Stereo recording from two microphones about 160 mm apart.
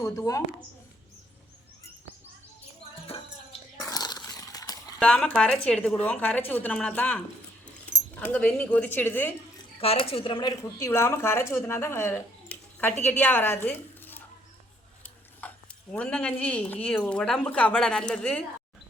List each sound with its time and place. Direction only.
0.0 s speech: 20° left (ahead or behind)
3.1 s music: 40° left (ahead or behind)
3.8 s a sound: 25° left (ahead or behind)
4.9 s speech: 5° left (ahead or behind)
9.8 s speech: 35° left (ahead or behind); by 18.4 s 5° left (ahead or behind)